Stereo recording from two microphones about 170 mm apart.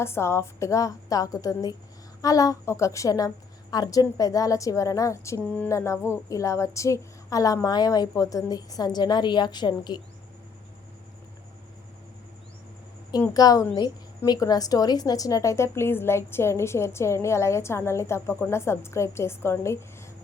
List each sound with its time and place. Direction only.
0.0 s a woman's voice: 15° left (ahead or behind)
13.3 s a woman's voice: 20° left (ahead or behind)